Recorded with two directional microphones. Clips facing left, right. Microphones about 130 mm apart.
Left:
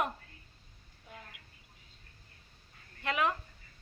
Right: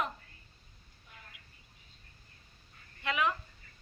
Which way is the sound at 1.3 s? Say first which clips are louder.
Left 2 dB; 65° left (ahead or behind).